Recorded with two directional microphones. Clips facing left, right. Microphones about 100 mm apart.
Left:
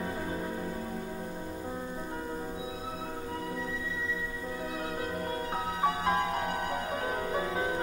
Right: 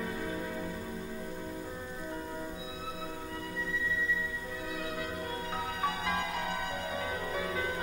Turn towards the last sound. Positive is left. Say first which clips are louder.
# left 3 dB
turn(degrees=35)  # may be behind; listen again after turning